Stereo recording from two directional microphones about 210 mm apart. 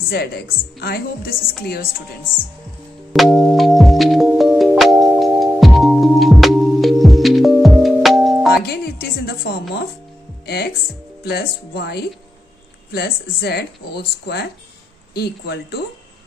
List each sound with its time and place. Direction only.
0.1 s speech: 50° left (ahead or behind)
3.1 s music: centre (ahead or behind)
8.6 s a sound: 50° left (ahead or behind)
10.4 s speech: 50° left (ahead or behind)